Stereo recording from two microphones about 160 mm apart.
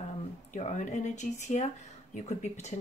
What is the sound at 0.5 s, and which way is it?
Speech, 50° left (ahead or behind).